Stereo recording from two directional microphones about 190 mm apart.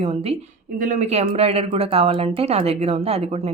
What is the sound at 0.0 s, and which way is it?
Speech, 30° right (ahead or behind).